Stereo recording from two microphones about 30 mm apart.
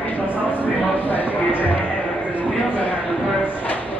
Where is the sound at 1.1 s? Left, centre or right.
Left.